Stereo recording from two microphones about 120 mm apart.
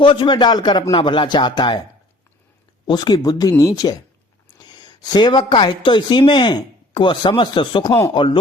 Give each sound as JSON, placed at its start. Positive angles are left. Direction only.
{"t": 0.0, "sound": "speech", "side_deg": 40}
{"t": 2.8, "sound": "speech", "side_deg": 35}
{"t": 8.1, "sound": "chopping", "side_deg": 45}